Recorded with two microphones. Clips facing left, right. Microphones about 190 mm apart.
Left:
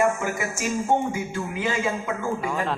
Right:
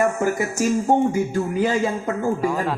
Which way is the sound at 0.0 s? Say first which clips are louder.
Right 3 dB; 40° right (ahead or behind).